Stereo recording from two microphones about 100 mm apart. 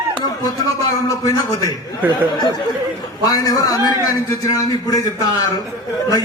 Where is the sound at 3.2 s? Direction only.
40° left (ahead or behind).